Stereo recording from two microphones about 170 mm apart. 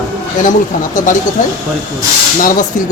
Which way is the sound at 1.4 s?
50° left (ahead or behind).